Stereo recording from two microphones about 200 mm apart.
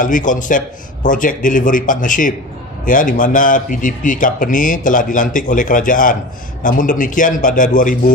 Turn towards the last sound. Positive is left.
turn(degrees=40)  # may be behind; listen again after turning